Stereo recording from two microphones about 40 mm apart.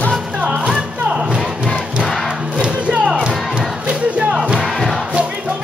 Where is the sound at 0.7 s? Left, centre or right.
Centre.